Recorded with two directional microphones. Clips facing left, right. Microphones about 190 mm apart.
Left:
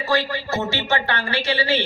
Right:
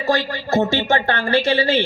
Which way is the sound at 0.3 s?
50° right (ahead or behind).